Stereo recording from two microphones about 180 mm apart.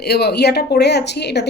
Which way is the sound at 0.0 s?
65° left (ahead or behind).